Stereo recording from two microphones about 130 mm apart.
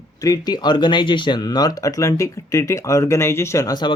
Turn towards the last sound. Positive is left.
turn(degrees=30)  # may be behind; listen again after turning